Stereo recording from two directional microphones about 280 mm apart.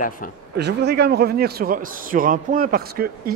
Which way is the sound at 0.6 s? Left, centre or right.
Right.